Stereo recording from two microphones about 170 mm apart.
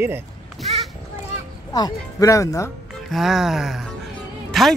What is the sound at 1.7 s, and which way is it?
Speech, 20° left (ahead or behind).